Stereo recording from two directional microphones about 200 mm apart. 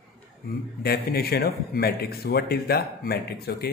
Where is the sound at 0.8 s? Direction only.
50° left (ahead or behind).